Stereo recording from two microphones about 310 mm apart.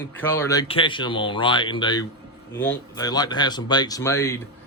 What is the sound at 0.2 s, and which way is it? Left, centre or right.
Speech, centre.